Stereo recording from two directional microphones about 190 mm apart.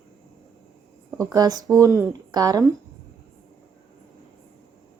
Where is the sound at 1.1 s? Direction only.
15° right (ahead or behind).